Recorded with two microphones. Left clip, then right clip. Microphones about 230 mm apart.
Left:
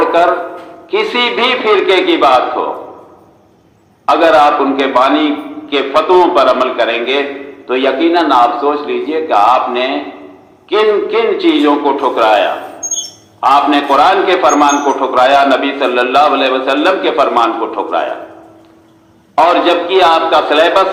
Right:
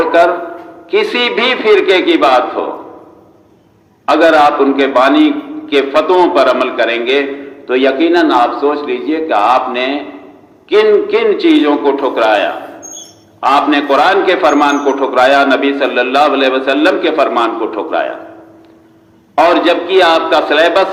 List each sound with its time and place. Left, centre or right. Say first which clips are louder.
0.9 s a man's voice: right 1 dB; right
4.0 s a man's voice: even; right
19.4 s a man's voice: even; right